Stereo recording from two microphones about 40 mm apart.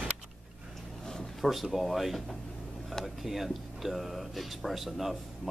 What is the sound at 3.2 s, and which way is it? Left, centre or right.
Speech, centre.